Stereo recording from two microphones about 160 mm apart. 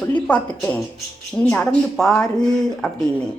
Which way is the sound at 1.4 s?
5° left (ahead or behind).